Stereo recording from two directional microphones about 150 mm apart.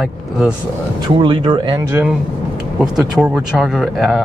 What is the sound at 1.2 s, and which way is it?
Speech, 35° right (ahead or behind).